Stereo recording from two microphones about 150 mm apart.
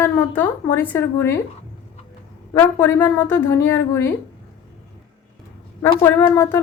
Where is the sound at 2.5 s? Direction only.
15° left (ahead or behind).